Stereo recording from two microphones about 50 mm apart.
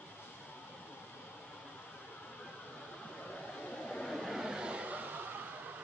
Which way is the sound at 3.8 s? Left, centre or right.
Centre.